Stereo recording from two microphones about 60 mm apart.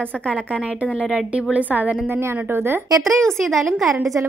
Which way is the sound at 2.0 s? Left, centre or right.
Right.